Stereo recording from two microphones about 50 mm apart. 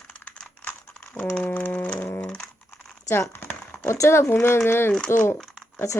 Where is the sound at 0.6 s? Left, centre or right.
Left.